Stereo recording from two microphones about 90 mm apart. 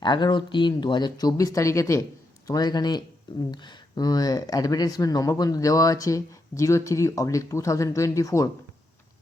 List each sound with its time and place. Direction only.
0.0 s speech: 60° left (ahead or behind)
1.4 s speech: 40° left (ahead or behind)
2.5 s speech: 50° left (ahead or behind)